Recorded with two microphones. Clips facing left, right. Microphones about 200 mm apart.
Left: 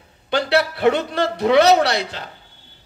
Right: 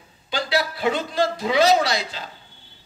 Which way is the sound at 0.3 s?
65° left (ahead or behind).